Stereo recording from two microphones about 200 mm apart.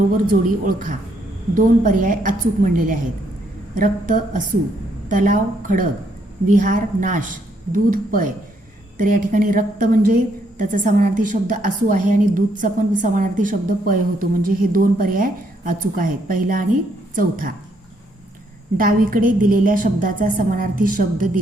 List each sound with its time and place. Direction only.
0.3 s a woman's voice: 40° right (ahead or behind)
18.8 s a woman's voice: 45° right (ahead or behind)